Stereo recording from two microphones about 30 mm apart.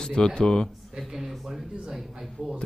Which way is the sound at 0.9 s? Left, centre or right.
Centre.